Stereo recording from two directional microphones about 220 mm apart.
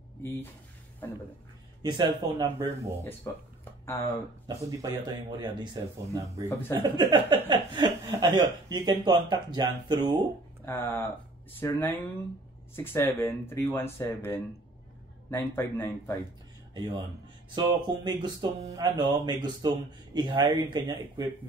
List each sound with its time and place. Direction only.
1.8 s speech: 20° right (ahead or behind)
3.3 s speech: 10° left (ahead or behind)
4.5 s speech: 15° right (ahead or behind)
10.6 s speech: 10° left (ahead or behind)
16.7 s a man's voice: 20° right (ahead or behind)